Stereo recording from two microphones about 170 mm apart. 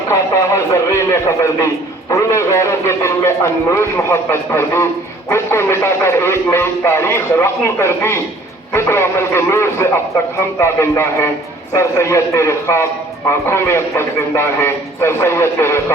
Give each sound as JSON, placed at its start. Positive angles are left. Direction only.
{"t": 0.1, "sound": "a man's voice", "side_deg": 15}